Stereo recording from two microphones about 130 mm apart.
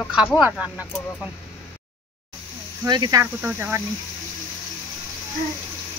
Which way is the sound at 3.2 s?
15° right (ahead or behind).